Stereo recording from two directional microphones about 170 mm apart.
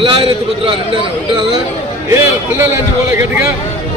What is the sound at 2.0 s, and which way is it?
A man's voice, 15° right (ahead or behind).